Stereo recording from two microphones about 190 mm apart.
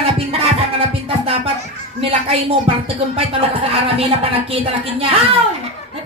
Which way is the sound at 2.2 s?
30° right (ahead or behind).